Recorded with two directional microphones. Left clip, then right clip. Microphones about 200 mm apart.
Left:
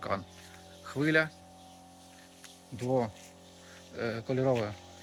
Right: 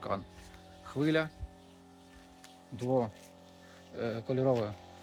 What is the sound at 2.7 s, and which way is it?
Speech, 5° right (ahead or behind).